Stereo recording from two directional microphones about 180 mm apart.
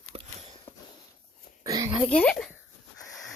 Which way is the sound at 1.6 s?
20° right (ahead or behind).